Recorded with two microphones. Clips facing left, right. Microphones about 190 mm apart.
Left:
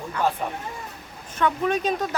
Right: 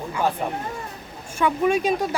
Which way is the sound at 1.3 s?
10° right (ahead or behind).